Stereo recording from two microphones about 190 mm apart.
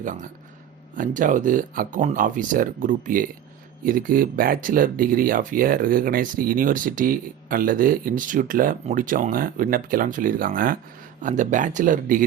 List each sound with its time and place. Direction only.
0.0 s speech: 40° right (ahead or behind)